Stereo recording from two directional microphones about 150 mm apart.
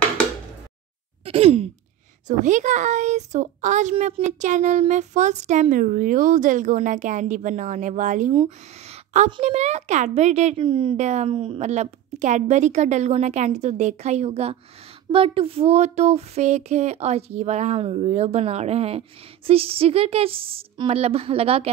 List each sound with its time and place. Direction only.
1.2 s sigh: 40° right (ahead or behind)
2.2 s a woman's voice: 55° right (ahead or behind)